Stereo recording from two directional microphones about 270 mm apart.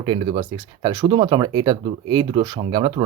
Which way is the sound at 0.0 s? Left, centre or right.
Centre.